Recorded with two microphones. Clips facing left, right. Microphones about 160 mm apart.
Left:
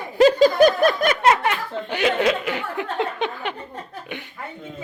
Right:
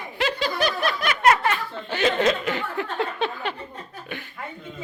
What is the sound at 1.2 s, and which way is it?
Speech, 20° left (ahead or behind).